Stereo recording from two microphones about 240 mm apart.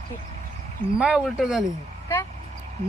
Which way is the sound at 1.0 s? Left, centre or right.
Centre.